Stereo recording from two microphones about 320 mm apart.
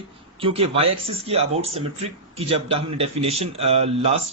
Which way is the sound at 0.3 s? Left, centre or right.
Centre.